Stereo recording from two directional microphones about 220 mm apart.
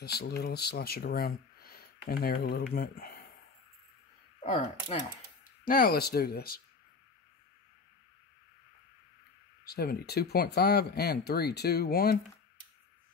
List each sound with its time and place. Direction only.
0.0 s speech: 45° left (ahead or behind)
4.8 s speech: 35° left (ahead or behind)
9.7 s speech: 45° left (ahead or behind)